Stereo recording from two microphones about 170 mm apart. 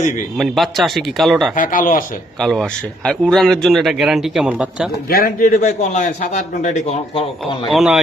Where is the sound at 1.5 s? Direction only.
55° left (ahead or behind).